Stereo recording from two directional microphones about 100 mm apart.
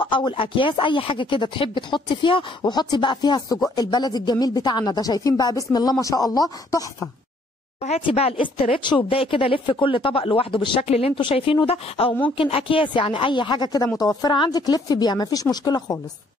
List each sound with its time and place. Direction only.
0.0 s a woman's voice: 55° left (ahead or behind)
2.6 s speech: 45° left (ahead or behind)
7.9 s a woman's voice: 80° left
10.8 s speech: 85° left
11.1 s speech: 60° left (ahead or behind); by 12.2 s 80° left
12.4 s a woman's voice: 65° left (ahead or behind); by 16.0 s 40° left (ahead or behind)